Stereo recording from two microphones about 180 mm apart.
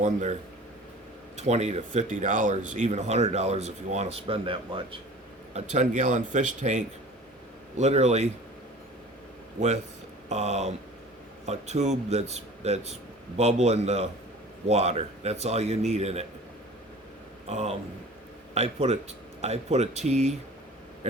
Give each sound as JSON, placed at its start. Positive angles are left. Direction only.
{"t": 0.0, "sound": "speech", "side_deg": -40}
{"t": 1.4, "sound": "speech", "side_deg": -40}
{"t": 5.5, "sound": "a man's voice", "side_deg": -40}
{"t": 10.2, "sound": "speech", "side_deg": -40}
{"t": 17.4, "sound": "speech", "side_deg": -35}